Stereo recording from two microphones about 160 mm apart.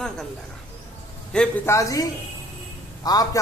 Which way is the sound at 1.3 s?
5° left (ahead or behind).